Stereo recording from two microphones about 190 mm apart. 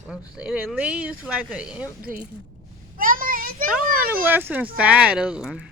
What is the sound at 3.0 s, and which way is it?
Vehicle, 45° right (ahead or behind).